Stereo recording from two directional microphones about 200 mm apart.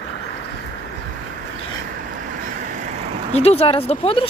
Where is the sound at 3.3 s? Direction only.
30° left (ahead or behind).